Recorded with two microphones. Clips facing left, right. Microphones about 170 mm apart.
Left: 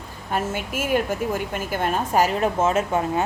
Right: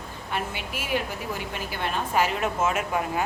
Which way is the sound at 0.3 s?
45° left (ahead or behind).